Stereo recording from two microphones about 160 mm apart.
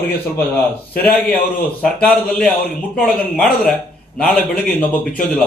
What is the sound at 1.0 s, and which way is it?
Speech, 10° left (ahead or behind).